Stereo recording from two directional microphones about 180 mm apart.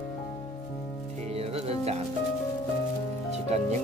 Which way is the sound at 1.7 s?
35° right (ahead or behind).